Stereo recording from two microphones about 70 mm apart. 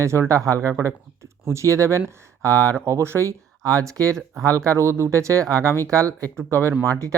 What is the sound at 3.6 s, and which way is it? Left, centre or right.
Speech, right.